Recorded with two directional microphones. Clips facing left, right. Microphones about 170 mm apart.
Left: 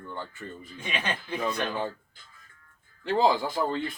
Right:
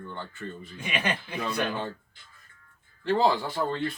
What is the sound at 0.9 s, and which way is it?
Speech, 10° right (ahead or behind).